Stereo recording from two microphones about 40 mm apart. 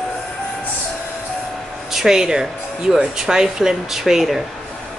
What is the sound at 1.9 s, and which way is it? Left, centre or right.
Speech, centre.